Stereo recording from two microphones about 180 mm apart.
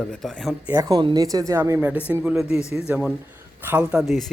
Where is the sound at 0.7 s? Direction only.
15° right (ahead or behind).